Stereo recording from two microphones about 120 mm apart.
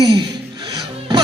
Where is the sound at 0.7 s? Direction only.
30° right (ahead or behind).